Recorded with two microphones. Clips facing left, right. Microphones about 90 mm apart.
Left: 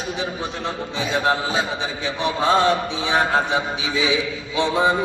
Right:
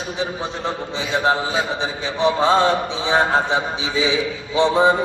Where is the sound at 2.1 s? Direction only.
25° right (ahead or behind).